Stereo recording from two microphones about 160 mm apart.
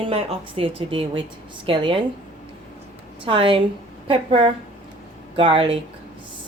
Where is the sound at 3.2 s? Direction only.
35° right (ahead or behind).